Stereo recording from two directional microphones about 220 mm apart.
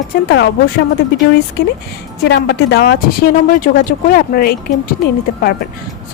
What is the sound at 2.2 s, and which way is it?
A woman's voice, 50° left (ahead or behind).